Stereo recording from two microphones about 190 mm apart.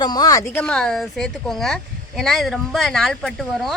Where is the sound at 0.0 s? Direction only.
20° left (ahead or behind).